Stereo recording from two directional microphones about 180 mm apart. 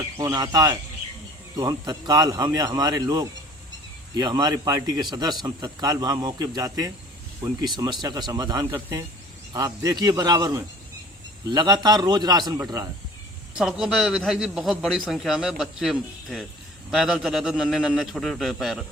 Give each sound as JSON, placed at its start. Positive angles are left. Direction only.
{"t": 0.2, "sound": "a man's voice", "side_deg": -20}
{"t": 13.6, "sound": "a man's voice", "side_deg": -5}